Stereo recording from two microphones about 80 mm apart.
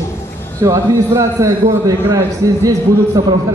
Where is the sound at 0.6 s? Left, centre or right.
Right.